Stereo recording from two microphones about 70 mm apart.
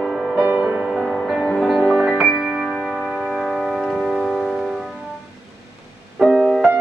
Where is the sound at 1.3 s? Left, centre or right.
Centre.